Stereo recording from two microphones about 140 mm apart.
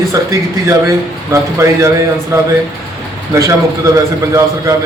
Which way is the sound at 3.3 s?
20° right (ahead or behind).